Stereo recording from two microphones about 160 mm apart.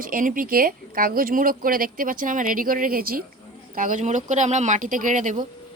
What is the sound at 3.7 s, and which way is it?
Speech, 55° right (ahead or behind).